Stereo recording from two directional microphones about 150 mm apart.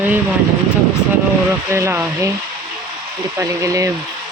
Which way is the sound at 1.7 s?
15° right (ahead or behind).